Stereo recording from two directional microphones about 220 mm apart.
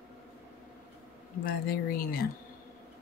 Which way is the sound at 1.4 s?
40° left (ahead or behind).